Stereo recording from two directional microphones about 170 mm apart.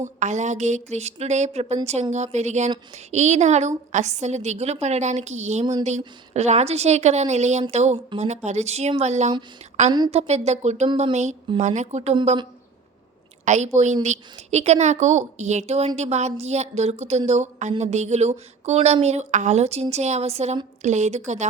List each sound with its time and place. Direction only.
0.0 s a woman's voice: 45° right (ahead or behind)
13.4 s a woman's voice: 45° right (ahead or behind)